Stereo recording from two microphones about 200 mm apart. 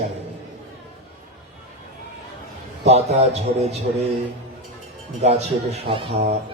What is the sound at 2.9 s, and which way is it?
Speech, 35° right (ahead or behind).